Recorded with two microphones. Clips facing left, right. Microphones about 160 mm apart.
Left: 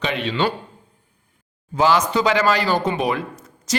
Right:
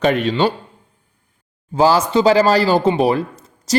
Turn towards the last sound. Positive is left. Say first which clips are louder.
# right 6 dB
turn(degrees=-35)  # may be behind; listen again after turning